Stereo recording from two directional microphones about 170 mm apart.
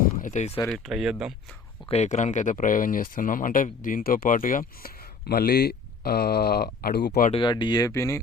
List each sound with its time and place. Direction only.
0.0 s a sound: 50° left (ahead or behind)
0.7 s speech: centre (ahead or behind)
1.9 s speech: 40° left (ahead or behind); by 7.1 s 70° left (ahead or behind)
7.3 s speech: 25° left (ahead or behind)